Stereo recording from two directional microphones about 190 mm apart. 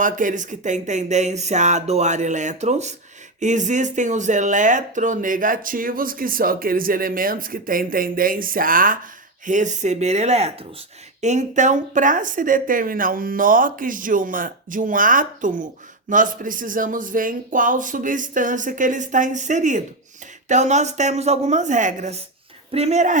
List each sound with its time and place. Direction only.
0.0 s speech: 45° right (ahead or behind)